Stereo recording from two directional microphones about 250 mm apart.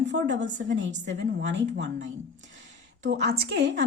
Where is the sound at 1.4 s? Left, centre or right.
Right.